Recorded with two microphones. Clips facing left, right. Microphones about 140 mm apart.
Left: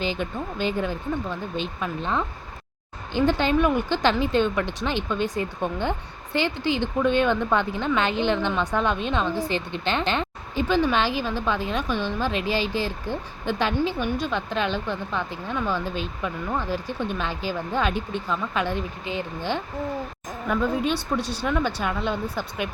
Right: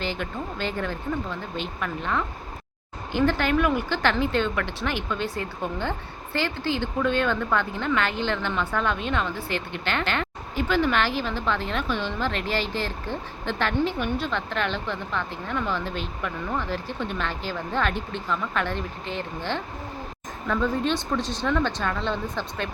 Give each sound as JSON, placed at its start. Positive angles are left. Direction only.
{"t": 0.0, "sound": "speech", "side_deg": 15}